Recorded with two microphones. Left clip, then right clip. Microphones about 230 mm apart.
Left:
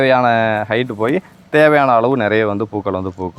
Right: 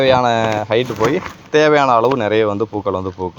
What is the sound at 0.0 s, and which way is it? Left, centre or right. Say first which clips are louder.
Speech: left 1 dB; left.